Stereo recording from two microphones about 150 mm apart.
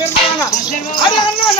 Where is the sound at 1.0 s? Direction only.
30° left (ahead or behind).